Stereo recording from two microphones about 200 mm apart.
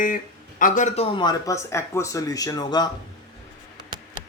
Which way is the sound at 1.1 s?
20° left (ahead or behind).